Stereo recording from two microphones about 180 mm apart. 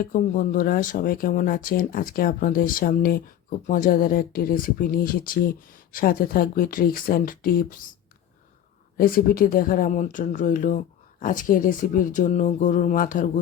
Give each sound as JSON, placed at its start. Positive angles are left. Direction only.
{"t": 0.1, "sound": "speech", "side_deg": 50}
{"t": 9.0, "sound": "speech", "side_deg": 55}